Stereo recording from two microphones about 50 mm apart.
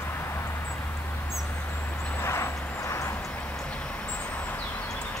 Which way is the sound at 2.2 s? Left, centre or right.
Left.